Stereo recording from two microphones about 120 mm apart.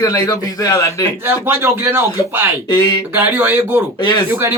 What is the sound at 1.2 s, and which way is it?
Speech, 20° right (ahead or behind).